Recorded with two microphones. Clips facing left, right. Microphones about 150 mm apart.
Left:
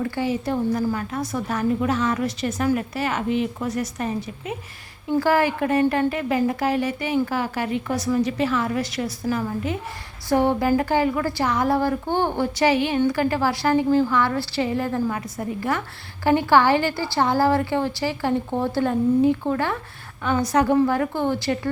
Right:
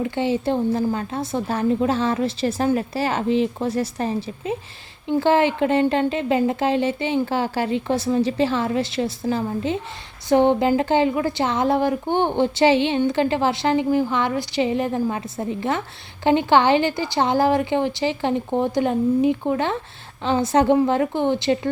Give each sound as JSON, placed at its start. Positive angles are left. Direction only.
{"t": 0.0, "sound": "a woman's voice", "side_deg": -25}